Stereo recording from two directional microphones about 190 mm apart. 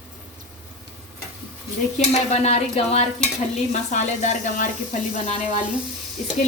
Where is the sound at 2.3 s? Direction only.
35° left (ahead or behind).